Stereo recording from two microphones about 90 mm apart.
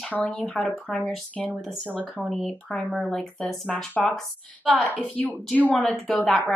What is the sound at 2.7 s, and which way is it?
A woman's voice, 5° left (ahead or behind).